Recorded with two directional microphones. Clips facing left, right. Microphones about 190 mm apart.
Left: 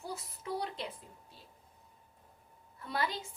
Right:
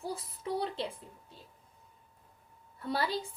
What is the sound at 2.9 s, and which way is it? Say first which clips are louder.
Speech: right 3 dB; 35° right (ahead or behind).